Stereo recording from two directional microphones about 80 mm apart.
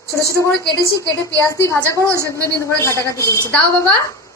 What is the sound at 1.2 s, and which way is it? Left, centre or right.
Speech, left.